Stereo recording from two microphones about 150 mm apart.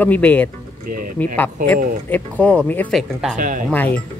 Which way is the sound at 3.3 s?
60° right (ahead or behind).